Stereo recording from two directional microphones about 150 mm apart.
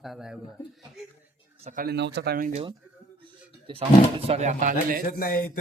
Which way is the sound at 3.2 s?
35° right (ahead or behind).